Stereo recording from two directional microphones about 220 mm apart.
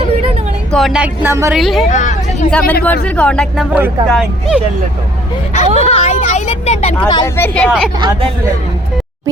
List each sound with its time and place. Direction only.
0.7 s speech: centre (ahead or behind)
1.5 s speech: centre (ahead or behind)
1.9 s vehicle: 35° left (ahead or behind)
2.5 s speech: 5° left (ahead or behind)
5.5 s vehicle: 30° left (ahead or behind)
7.1 s a woman's voice: 15° left (ahead or behind)
7.9 s speech: 20° right (ahead or behind)